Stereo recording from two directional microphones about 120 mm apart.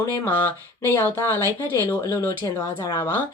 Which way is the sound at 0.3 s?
15° left (ahead or behind).